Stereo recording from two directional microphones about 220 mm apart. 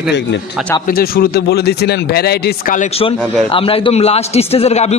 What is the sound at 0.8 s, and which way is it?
A man's voice, 40° left (ahead or behind).